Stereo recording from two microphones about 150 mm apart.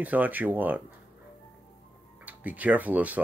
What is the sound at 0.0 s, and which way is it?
Speech, 10° right (ahead or behind).